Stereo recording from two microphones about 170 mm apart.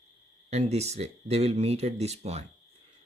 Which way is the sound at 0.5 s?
40° right (ahead or behind).